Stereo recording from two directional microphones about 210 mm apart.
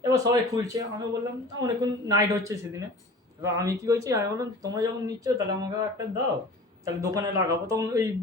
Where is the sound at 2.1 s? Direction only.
15° right (ahead or behind).